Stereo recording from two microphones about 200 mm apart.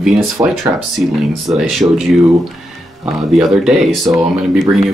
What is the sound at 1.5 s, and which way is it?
Speech, centre (ahead or behind).